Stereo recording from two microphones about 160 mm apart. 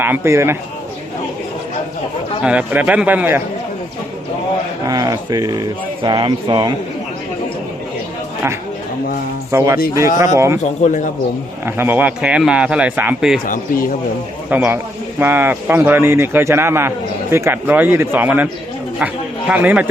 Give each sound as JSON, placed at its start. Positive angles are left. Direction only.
{"t": 0.0, "sound": "a man's voice", "side_deg": -15}
{"t": 2.4, "sound": "a man's voice", "side_deg": -10}
{"t": 4.9, "sound": "speech", "side_deg": -25}
{"t": 9.5, "sound": "a man's voice", "side_deg": -15}
{"t": 10.8, "sound": "speech", "side_deg": 50}
{"t": 11.6, "sound": "a man's voice", "side_deg": -15}
{"t": 13.5, "sound": "speech", "side_deg": 65}
{"t": 14.5, "sound": "a man's voice", "side_deg": -10}